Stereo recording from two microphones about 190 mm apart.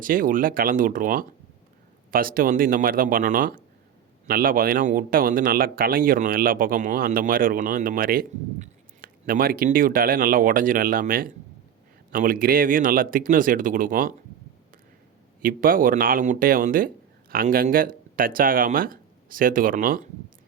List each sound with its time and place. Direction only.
0.0 s speech: 45° right (ahead or behind)
15.4 s speech: 45° right (ahead or behind)